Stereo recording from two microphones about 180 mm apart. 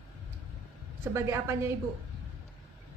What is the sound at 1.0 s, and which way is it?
Speech, 15° right (ahead or behind).